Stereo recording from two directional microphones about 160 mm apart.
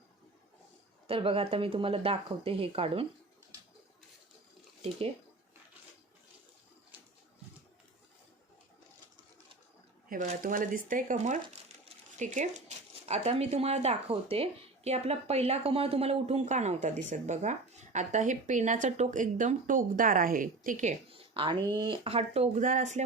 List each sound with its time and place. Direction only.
1.0 s speech: 35° right (ahead or behind)
10.1 s speech: 55° right (ahead or behind)
21.1 s a sound: 35° right (ahead or behind)
21.6 s speech: 25° right (ahead or behind); by 23.0 s 50° right (ahead or behind)